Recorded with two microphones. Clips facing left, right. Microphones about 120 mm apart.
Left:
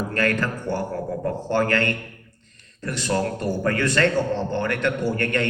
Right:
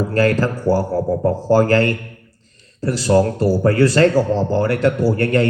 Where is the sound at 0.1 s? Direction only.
35° right (ahead or behind).